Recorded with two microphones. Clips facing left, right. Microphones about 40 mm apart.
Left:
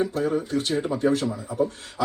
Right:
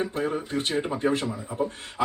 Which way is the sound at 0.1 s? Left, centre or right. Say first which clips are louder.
Left 3 dB; right.